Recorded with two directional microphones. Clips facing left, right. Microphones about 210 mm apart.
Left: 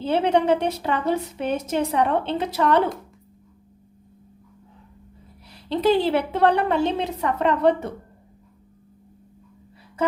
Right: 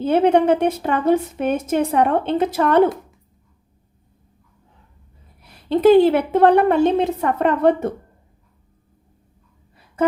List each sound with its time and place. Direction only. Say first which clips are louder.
0.0 s a woman's voice: right 5 dB; 50° right (ahead or behind)
5.5 s a woman's voice: right 7 dB; 50° right (ahead or behind)